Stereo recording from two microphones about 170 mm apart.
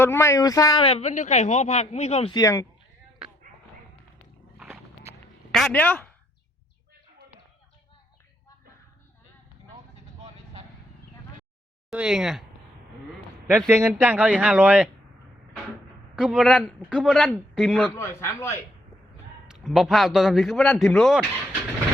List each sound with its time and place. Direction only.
0.0 s speech: 15° left (ahead or behind)
0.9 s speech: 40° left (ahead or behind)
2.3 s speech: 20° left (ahead or behind)
4.5 s a sound: 5° right (ahead or behind)
5.5 s speech: centre (ahead or behind)
11.9 s a man's voice: 5° right (ahead or behind)
13.5 s speech: 15° right (ahead or behind)
16.1 s a man's voice: 5° right (ahead or behind)
17.9 s a man's voice: 15° left (ahead or behind)
19.5 s a man's voice: centre (ahead or behind)